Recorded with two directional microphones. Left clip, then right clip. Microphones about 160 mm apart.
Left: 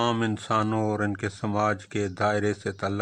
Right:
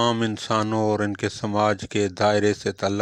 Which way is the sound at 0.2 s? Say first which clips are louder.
Right 2 dB; 30° right (ahead or behind).